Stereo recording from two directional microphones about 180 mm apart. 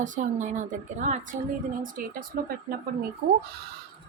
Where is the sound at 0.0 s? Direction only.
45° right (ahead or behind).